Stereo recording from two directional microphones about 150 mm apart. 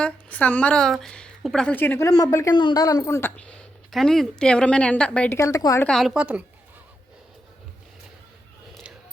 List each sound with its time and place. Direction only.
0.0 s a woman's voice: 10° left (ahead or behind)
3.2 s a woman's voice: 10° left (ahead or behind)
5.4 s speech: 20° left (ahead or behind)
5.9 s a woman's voice: centre (ahead or behind)